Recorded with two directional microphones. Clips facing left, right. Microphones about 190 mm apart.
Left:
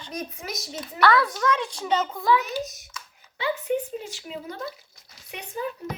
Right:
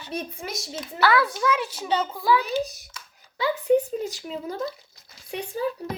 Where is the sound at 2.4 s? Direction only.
30° right (ahead or behind).